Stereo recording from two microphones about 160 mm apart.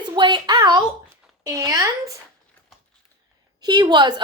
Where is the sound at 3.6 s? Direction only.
25° right (ahead or behind).